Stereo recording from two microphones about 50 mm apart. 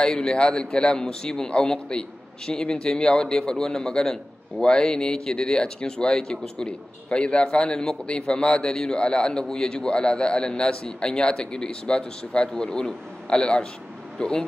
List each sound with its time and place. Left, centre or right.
0.0 s a man's voice: centre